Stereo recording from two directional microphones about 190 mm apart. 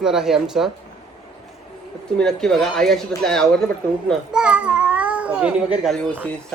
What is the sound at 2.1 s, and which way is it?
A man's voice, 5° left (ahead or behind).